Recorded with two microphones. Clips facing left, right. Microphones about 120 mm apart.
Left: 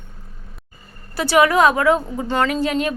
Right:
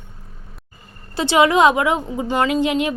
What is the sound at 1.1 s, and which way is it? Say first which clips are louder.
A woman's voice: even; 25° right (ahead or behind).